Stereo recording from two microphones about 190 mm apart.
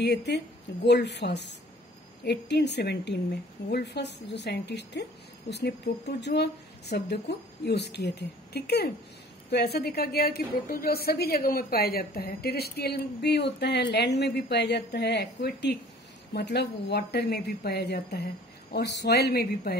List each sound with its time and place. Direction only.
0.0 s a woman's voice: 60° left (ahead or behind)